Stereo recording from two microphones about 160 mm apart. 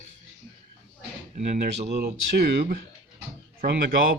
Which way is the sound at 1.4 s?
50° right (ahead or behind).